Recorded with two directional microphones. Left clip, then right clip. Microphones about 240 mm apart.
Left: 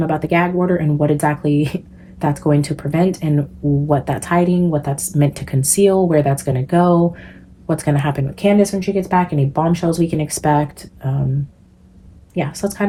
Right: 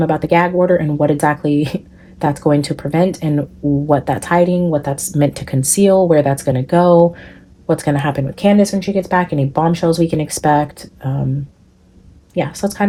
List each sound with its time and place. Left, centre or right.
0.0 s speech: right
12.3 s speech: right